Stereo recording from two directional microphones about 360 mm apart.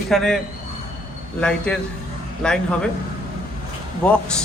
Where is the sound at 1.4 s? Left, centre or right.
Centre.